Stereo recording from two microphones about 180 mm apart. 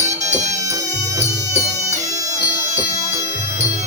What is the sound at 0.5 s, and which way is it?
Music, 20° right (ahead or behind).